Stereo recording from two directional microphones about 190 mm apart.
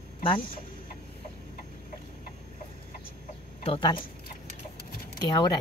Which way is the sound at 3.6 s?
25° left (ahead or behind).